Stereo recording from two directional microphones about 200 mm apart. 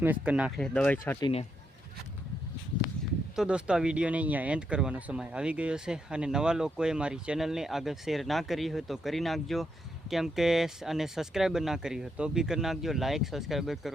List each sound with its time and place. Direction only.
0.0 s speech: 5° right (ahead or behind); by 1.2 s 10° left (ahead or behind)
1.2 s speech: 30° left (ahead or behind)
3.3 s speech: 5° right (ahead or behind)